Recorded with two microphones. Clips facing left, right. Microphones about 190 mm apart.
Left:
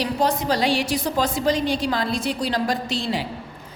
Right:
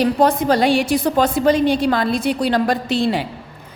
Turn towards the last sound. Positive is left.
turn(degrees=-60)  # may be behind; listen again after turning